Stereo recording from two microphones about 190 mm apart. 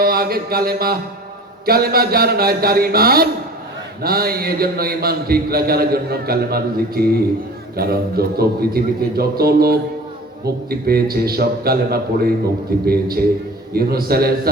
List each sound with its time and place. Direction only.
0.0 s a man's voice: 55° right (ahead or behind)